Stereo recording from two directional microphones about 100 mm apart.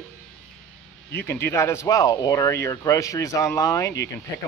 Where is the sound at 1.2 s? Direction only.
20° left (ahead or behind).